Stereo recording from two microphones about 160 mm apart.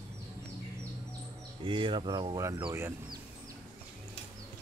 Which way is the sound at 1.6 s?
30° right (ahead or behind).